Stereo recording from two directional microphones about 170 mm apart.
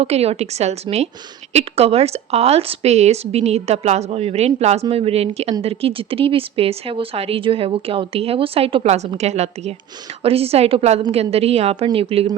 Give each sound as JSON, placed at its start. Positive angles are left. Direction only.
{"t": 0.0, "sound": "speech", "side_deg": -35}